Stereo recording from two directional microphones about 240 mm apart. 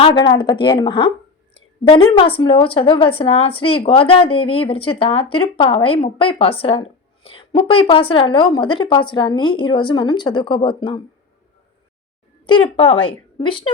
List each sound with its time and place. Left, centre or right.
0.0 s speech: centre
12.5 s speech: left